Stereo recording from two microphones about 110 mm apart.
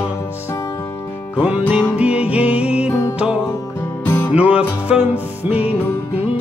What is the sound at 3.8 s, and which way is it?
Music, 20° left (ahead or behind).